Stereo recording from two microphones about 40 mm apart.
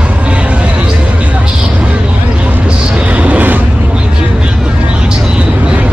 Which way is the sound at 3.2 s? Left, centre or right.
Right.